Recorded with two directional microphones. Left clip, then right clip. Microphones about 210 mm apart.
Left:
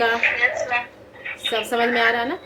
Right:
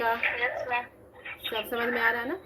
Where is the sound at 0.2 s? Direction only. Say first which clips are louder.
Left 9 dB; 20° right (ahead or behind).